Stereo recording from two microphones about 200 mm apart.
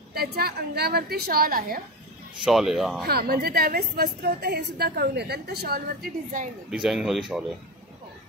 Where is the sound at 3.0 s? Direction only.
50° right (ahead or behind).